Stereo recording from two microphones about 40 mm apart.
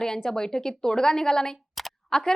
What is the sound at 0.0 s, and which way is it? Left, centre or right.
A woman's voice, centre.